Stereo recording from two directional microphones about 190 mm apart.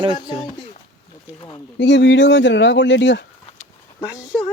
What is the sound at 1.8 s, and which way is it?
Speech, 70° left (ahead or behind).